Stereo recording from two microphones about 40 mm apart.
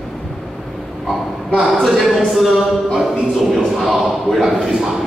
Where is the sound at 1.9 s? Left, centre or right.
Centre.